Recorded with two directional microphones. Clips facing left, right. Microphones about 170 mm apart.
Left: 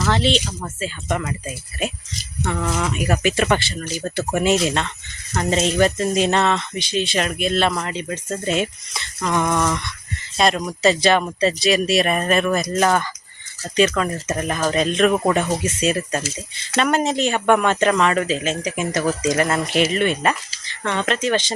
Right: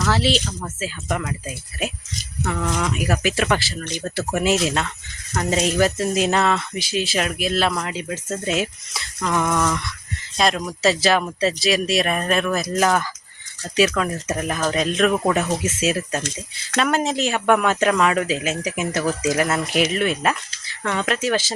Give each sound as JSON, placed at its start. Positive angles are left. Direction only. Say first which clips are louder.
{"t": 0.0, "sound": "speech", "louder": "left 1 dB", "side_deg": -5}